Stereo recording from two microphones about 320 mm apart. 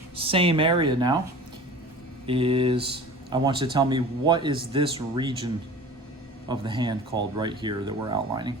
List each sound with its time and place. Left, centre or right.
0.2 s a man's voice: centre
2.2 s a man's voice: centre
6.5 s a man's voice: centre